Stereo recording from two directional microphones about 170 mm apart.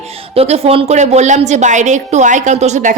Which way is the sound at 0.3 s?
35° right (ahead or behind).